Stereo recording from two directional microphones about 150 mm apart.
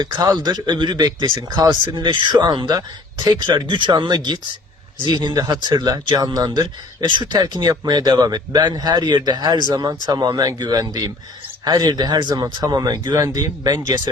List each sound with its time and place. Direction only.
0.0 s a man's voice: 25° right (ahead or behind)